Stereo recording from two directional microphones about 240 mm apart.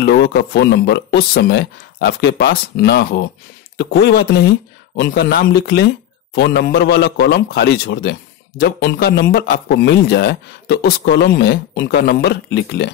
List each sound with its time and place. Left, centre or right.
0.0 s a man's voice: left